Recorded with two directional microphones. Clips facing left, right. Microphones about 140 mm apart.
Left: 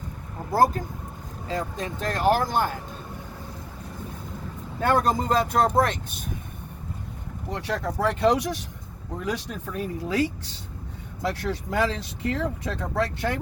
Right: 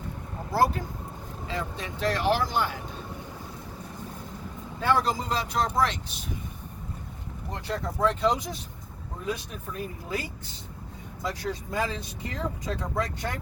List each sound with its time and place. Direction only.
0.5 s speech: 45° left (ahead or behind)
4.8 s speech: 50° left (ahead or behind)
7.5 s speech: 70° left (ahead or behind)
11.2 s speech: 70° left (ahead or behind)